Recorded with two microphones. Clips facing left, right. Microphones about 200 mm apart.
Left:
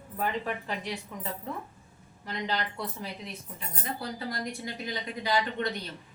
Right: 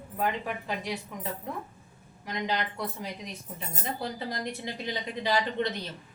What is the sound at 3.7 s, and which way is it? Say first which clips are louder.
A woman's voice: right 2 dB; 25° right (ahead or behind).